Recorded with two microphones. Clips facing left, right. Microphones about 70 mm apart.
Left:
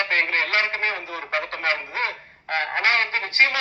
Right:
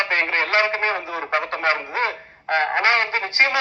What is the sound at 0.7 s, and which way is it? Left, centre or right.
Speech, right.